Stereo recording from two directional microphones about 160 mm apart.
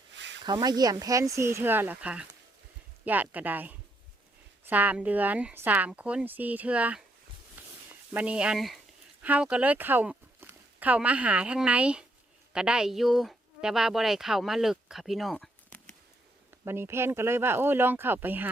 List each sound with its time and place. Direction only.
0.4 s speech: 25° right (ahead or behind); by 15.4 s centre (ahead or behind)
16.5 s speech: 15° right (ahead or behind)